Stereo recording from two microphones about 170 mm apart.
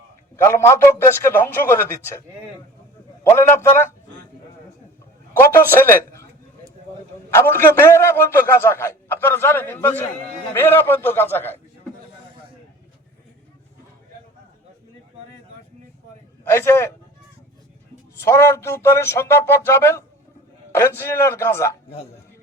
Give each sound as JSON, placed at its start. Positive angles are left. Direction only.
{"t": 0.4, "sound": "a man's voice", "side_deg": 15}
{"t": 3.2, "sound": "a man's voice", "side_deg": 15}
{"t": 5.4, "sound": "a man's voice", "side_deg": 15}
{"t": 7.3, "sound": "a man's voice", "side_deg": 15}
{"t": 16.4, "sound": "a man's voice", "side_deg": 15}
{"t": 18.3, "sound": "a man's voice", "side_deg": 15}